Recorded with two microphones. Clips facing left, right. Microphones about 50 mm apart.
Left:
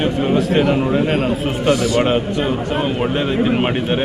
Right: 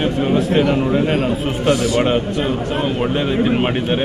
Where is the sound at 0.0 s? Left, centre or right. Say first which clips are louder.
Even; centre.